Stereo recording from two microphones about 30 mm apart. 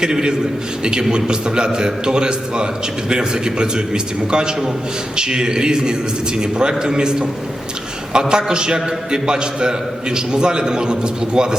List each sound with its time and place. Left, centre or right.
0.0 s a man's voice: right